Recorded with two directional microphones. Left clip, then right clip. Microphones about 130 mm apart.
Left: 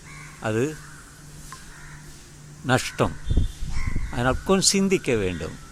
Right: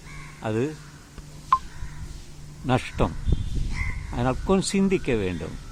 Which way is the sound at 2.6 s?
20° left (ahead or behind).